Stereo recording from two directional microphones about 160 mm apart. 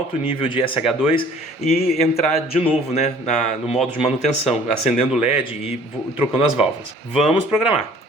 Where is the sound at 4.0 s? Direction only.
40° left (ahead or behind).